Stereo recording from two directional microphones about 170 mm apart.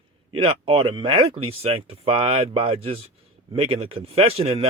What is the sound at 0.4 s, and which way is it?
Speech, 30° right (ahead or behind).